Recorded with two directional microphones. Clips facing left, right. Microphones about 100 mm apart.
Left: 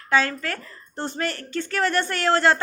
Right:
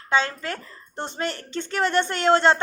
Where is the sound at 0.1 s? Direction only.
20° right (ahead or behind).